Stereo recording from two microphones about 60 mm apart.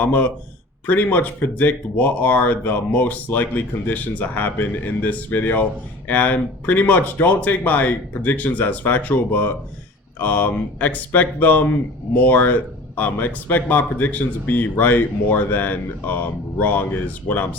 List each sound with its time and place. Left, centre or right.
0.0 s speech: left